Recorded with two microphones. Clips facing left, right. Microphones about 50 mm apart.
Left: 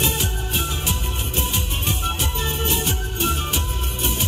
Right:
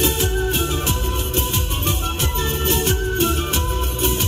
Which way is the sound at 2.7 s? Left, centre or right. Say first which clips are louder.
Right 5 dB; right.